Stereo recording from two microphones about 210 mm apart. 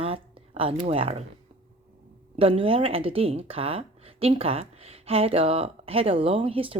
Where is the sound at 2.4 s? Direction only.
25° right (ahead or behind).